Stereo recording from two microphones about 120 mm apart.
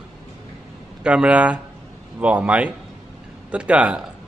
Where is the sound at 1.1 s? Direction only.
10° right (ahead or behind).